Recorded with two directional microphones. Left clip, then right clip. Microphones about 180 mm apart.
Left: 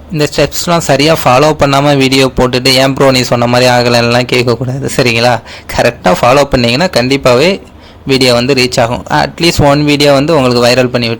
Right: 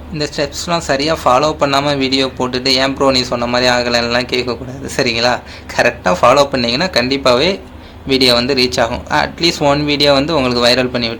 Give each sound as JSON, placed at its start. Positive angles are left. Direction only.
{"t": 0.2, "sound": "speech", "side_deg": 50}